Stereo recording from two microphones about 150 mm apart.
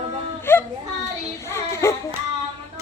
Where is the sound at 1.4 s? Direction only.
20° left (ahead or behind).